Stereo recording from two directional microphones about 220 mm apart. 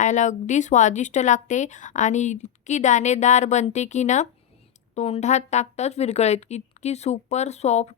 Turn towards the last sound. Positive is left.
turn(degrees=30)  # may be behind; listen again after turning